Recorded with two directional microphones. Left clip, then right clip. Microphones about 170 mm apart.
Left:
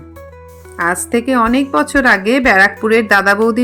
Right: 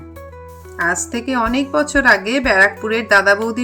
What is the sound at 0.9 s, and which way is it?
Speech, 30° left (ahead or behind).